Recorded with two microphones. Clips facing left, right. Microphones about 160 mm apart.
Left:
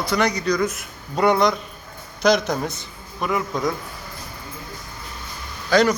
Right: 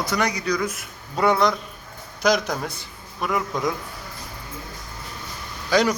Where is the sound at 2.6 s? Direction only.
20° left (ahead or behind).